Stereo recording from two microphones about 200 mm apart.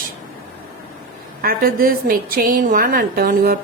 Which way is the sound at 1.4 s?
45° right (ahead or behind).